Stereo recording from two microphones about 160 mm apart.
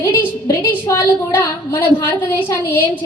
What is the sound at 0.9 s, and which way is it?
Child singing, 20° left (ahead or behind).